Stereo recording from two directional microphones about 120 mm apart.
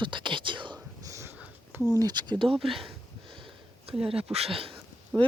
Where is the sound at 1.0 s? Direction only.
25° right (ahead or behind).